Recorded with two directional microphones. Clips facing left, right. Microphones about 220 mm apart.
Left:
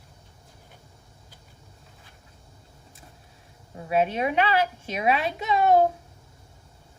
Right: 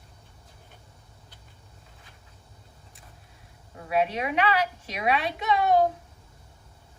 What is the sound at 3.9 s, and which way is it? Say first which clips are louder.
A woman's voice: left 2 dB; 30° left (ahead or behind).